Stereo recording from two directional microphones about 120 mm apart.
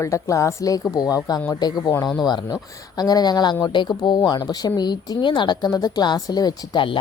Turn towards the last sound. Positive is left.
turn(degrees=45)  # may be behind; listen again after turning